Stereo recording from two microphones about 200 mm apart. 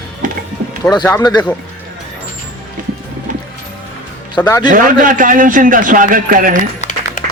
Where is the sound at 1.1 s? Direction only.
20° left (ahead or behind).